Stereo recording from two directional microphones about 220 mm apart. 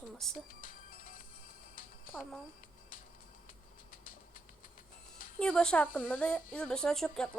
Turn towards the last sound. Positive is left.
turn(degrees=5)  # may be behind; listen again after turning